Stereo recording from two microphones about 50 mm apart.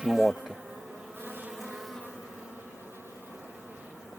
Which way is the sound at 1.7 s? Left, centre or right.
Centre.